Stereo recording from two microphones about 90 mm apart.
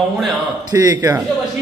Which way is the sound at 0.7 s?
40° right (ahead or behind).